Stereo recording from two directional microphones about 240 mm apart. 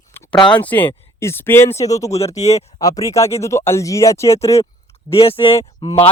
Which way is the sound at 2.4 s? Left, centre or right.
Left.